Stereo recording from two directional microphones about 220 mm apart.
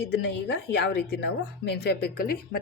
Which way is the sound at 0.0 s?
50° left (ahead or behind).